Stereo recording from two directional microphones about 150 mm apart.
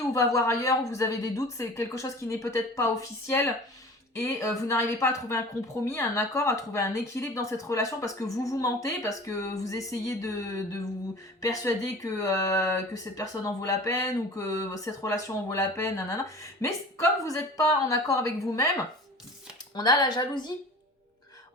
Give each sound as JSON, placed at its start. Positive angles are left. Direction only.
{"t": 0.0, "sound": "speech", "side_deg": 20}
{"t": 19.7, "sound": "speech", "side_deg": 25}